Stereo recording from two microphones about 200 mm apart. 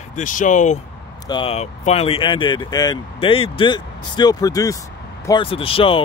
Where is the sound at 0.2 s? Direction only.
40° left (ahead or behind).